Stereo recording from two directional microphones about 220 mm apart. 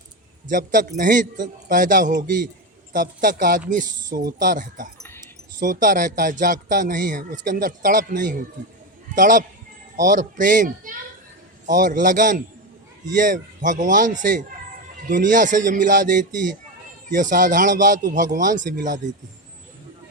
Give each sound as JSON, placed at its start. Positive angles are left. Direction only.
{"t": 0.4, "sound": "speech", "side_deg": -35}
{"t": 4.9, "sound": "dog", "side_deg": 10}
{"t": 5.5, "sound": "speech", "side_deg": -35}